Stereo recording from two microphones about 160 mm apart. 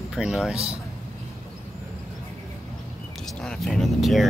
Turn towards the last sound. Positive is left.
turn(degrees=0)  # may be behind; listen again after turning